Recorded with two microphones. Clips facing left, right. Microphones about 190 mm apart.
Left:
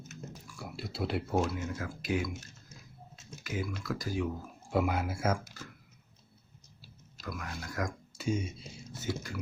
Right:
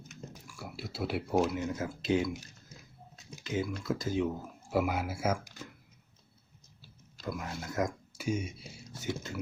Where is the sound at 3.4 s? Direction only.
25° right (ahead or behind).